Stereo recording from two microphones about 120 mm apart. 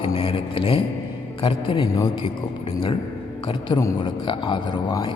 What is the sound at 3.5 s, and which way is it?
A man's voice, 40° left (ahead or behind).